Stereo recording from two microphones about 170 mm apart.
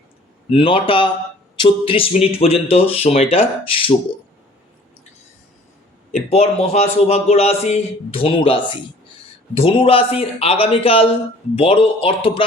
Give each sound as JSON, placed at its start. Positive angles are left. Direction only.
{"t": 0.5, "sound": "a man's voice", "side_deg": 30}
{"t": 6.1, "sound": "a man's voice", "side_deg": 45}